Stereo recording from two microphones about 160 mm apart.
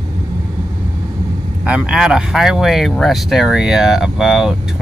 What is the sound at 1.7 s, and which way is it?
Speech, 5° right (ahead or behind).